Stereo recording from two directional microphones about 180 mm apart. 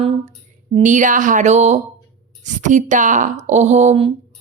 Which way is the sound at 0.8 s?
45° right (ahead or behind).